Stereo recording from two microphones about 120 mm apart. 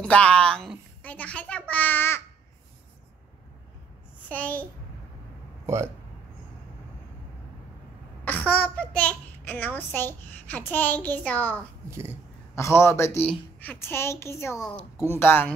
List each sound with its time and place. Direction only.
0.0 s a woman's voice: 10° left (ahead or behind)
4.3 s a child's voice: 15° left (ahead or behind)
8.3 s a child's voice: 15° left (ahead or behind)
11.9 s speech: 20° right (ahead or behind)
12.5 s speech: 20° left (ahead or behind)